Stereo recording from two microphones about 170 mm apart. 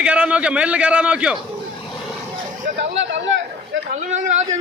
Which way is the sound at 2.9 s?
90° right.